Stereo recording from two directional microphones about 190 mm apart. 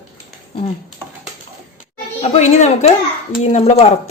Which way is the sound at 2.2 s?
35° left (ahead or behind).